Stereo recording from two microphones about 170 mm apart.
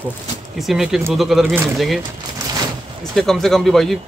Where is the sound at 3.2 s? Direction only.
Centre (ahead or behind).